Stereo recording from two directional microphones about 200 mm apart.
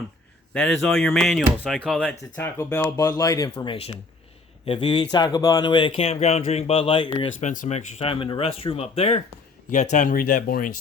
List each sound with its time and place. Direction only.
0.5 s speech: 5° left (ahead or behind); by 7.3 s 25° left (ahead or behind)
7.4 s speech: 40° left (ahead or behind)